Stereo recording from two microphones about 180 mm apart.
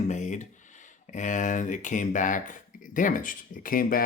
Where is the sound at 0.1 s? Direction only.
40° left (ahead or behind).